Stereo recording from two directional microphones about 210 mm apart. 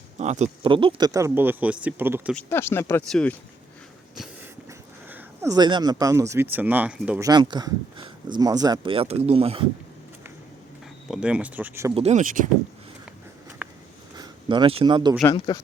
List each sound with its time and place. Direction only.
0.2 s speech: 30° right (ahead or behind); by 2.3 s 10° right (ahead or behind)
2.3 s speech: 10° left (ahead or behind)
5.0 s speech: 10° right (ahead or behind)
7.3 s speech: 20° right (ahead or behind)
11.1 s speech: 5° right (ahead or behind)
11.9 s speech: 30° right (ahead or behind)
14.2 s speech: 20° right (ahead or behind)
15.2 s speech: 15° left (ahead or behind)